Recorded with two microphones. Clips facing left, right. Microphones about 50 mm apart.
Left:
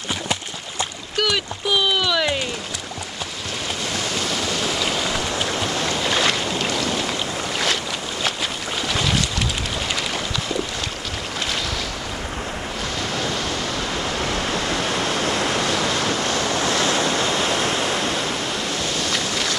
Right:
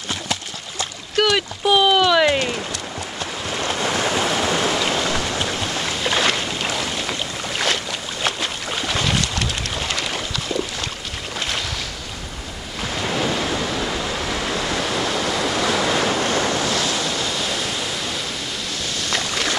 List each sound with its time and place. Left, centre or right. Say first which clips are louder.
1.1 s a sound: right 4 dB; centre
3.8 s waves: right 6 dB; right; by 5.3 s centre
5.4 s boat: left 1 dB; centre
13.1 s waves: right 5 dB; centre
16.6 s waves: left 2 dB; left
19.1 s boat: right 1 dB; centre